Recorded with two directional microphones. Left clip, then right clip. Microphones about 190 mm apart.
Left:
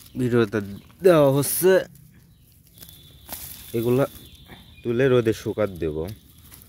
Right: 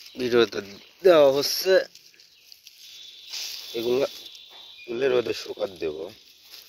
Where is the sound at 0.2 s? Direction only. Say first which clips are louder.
Right 1 dB; 10° left (ahead or behind).